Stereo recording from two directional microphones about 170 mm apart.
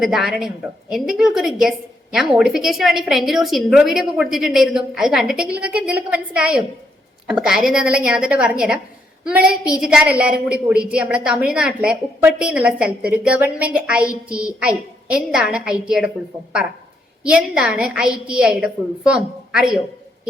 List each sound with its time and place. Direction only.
0.0 s a woman's voice: centre (ahead or behind)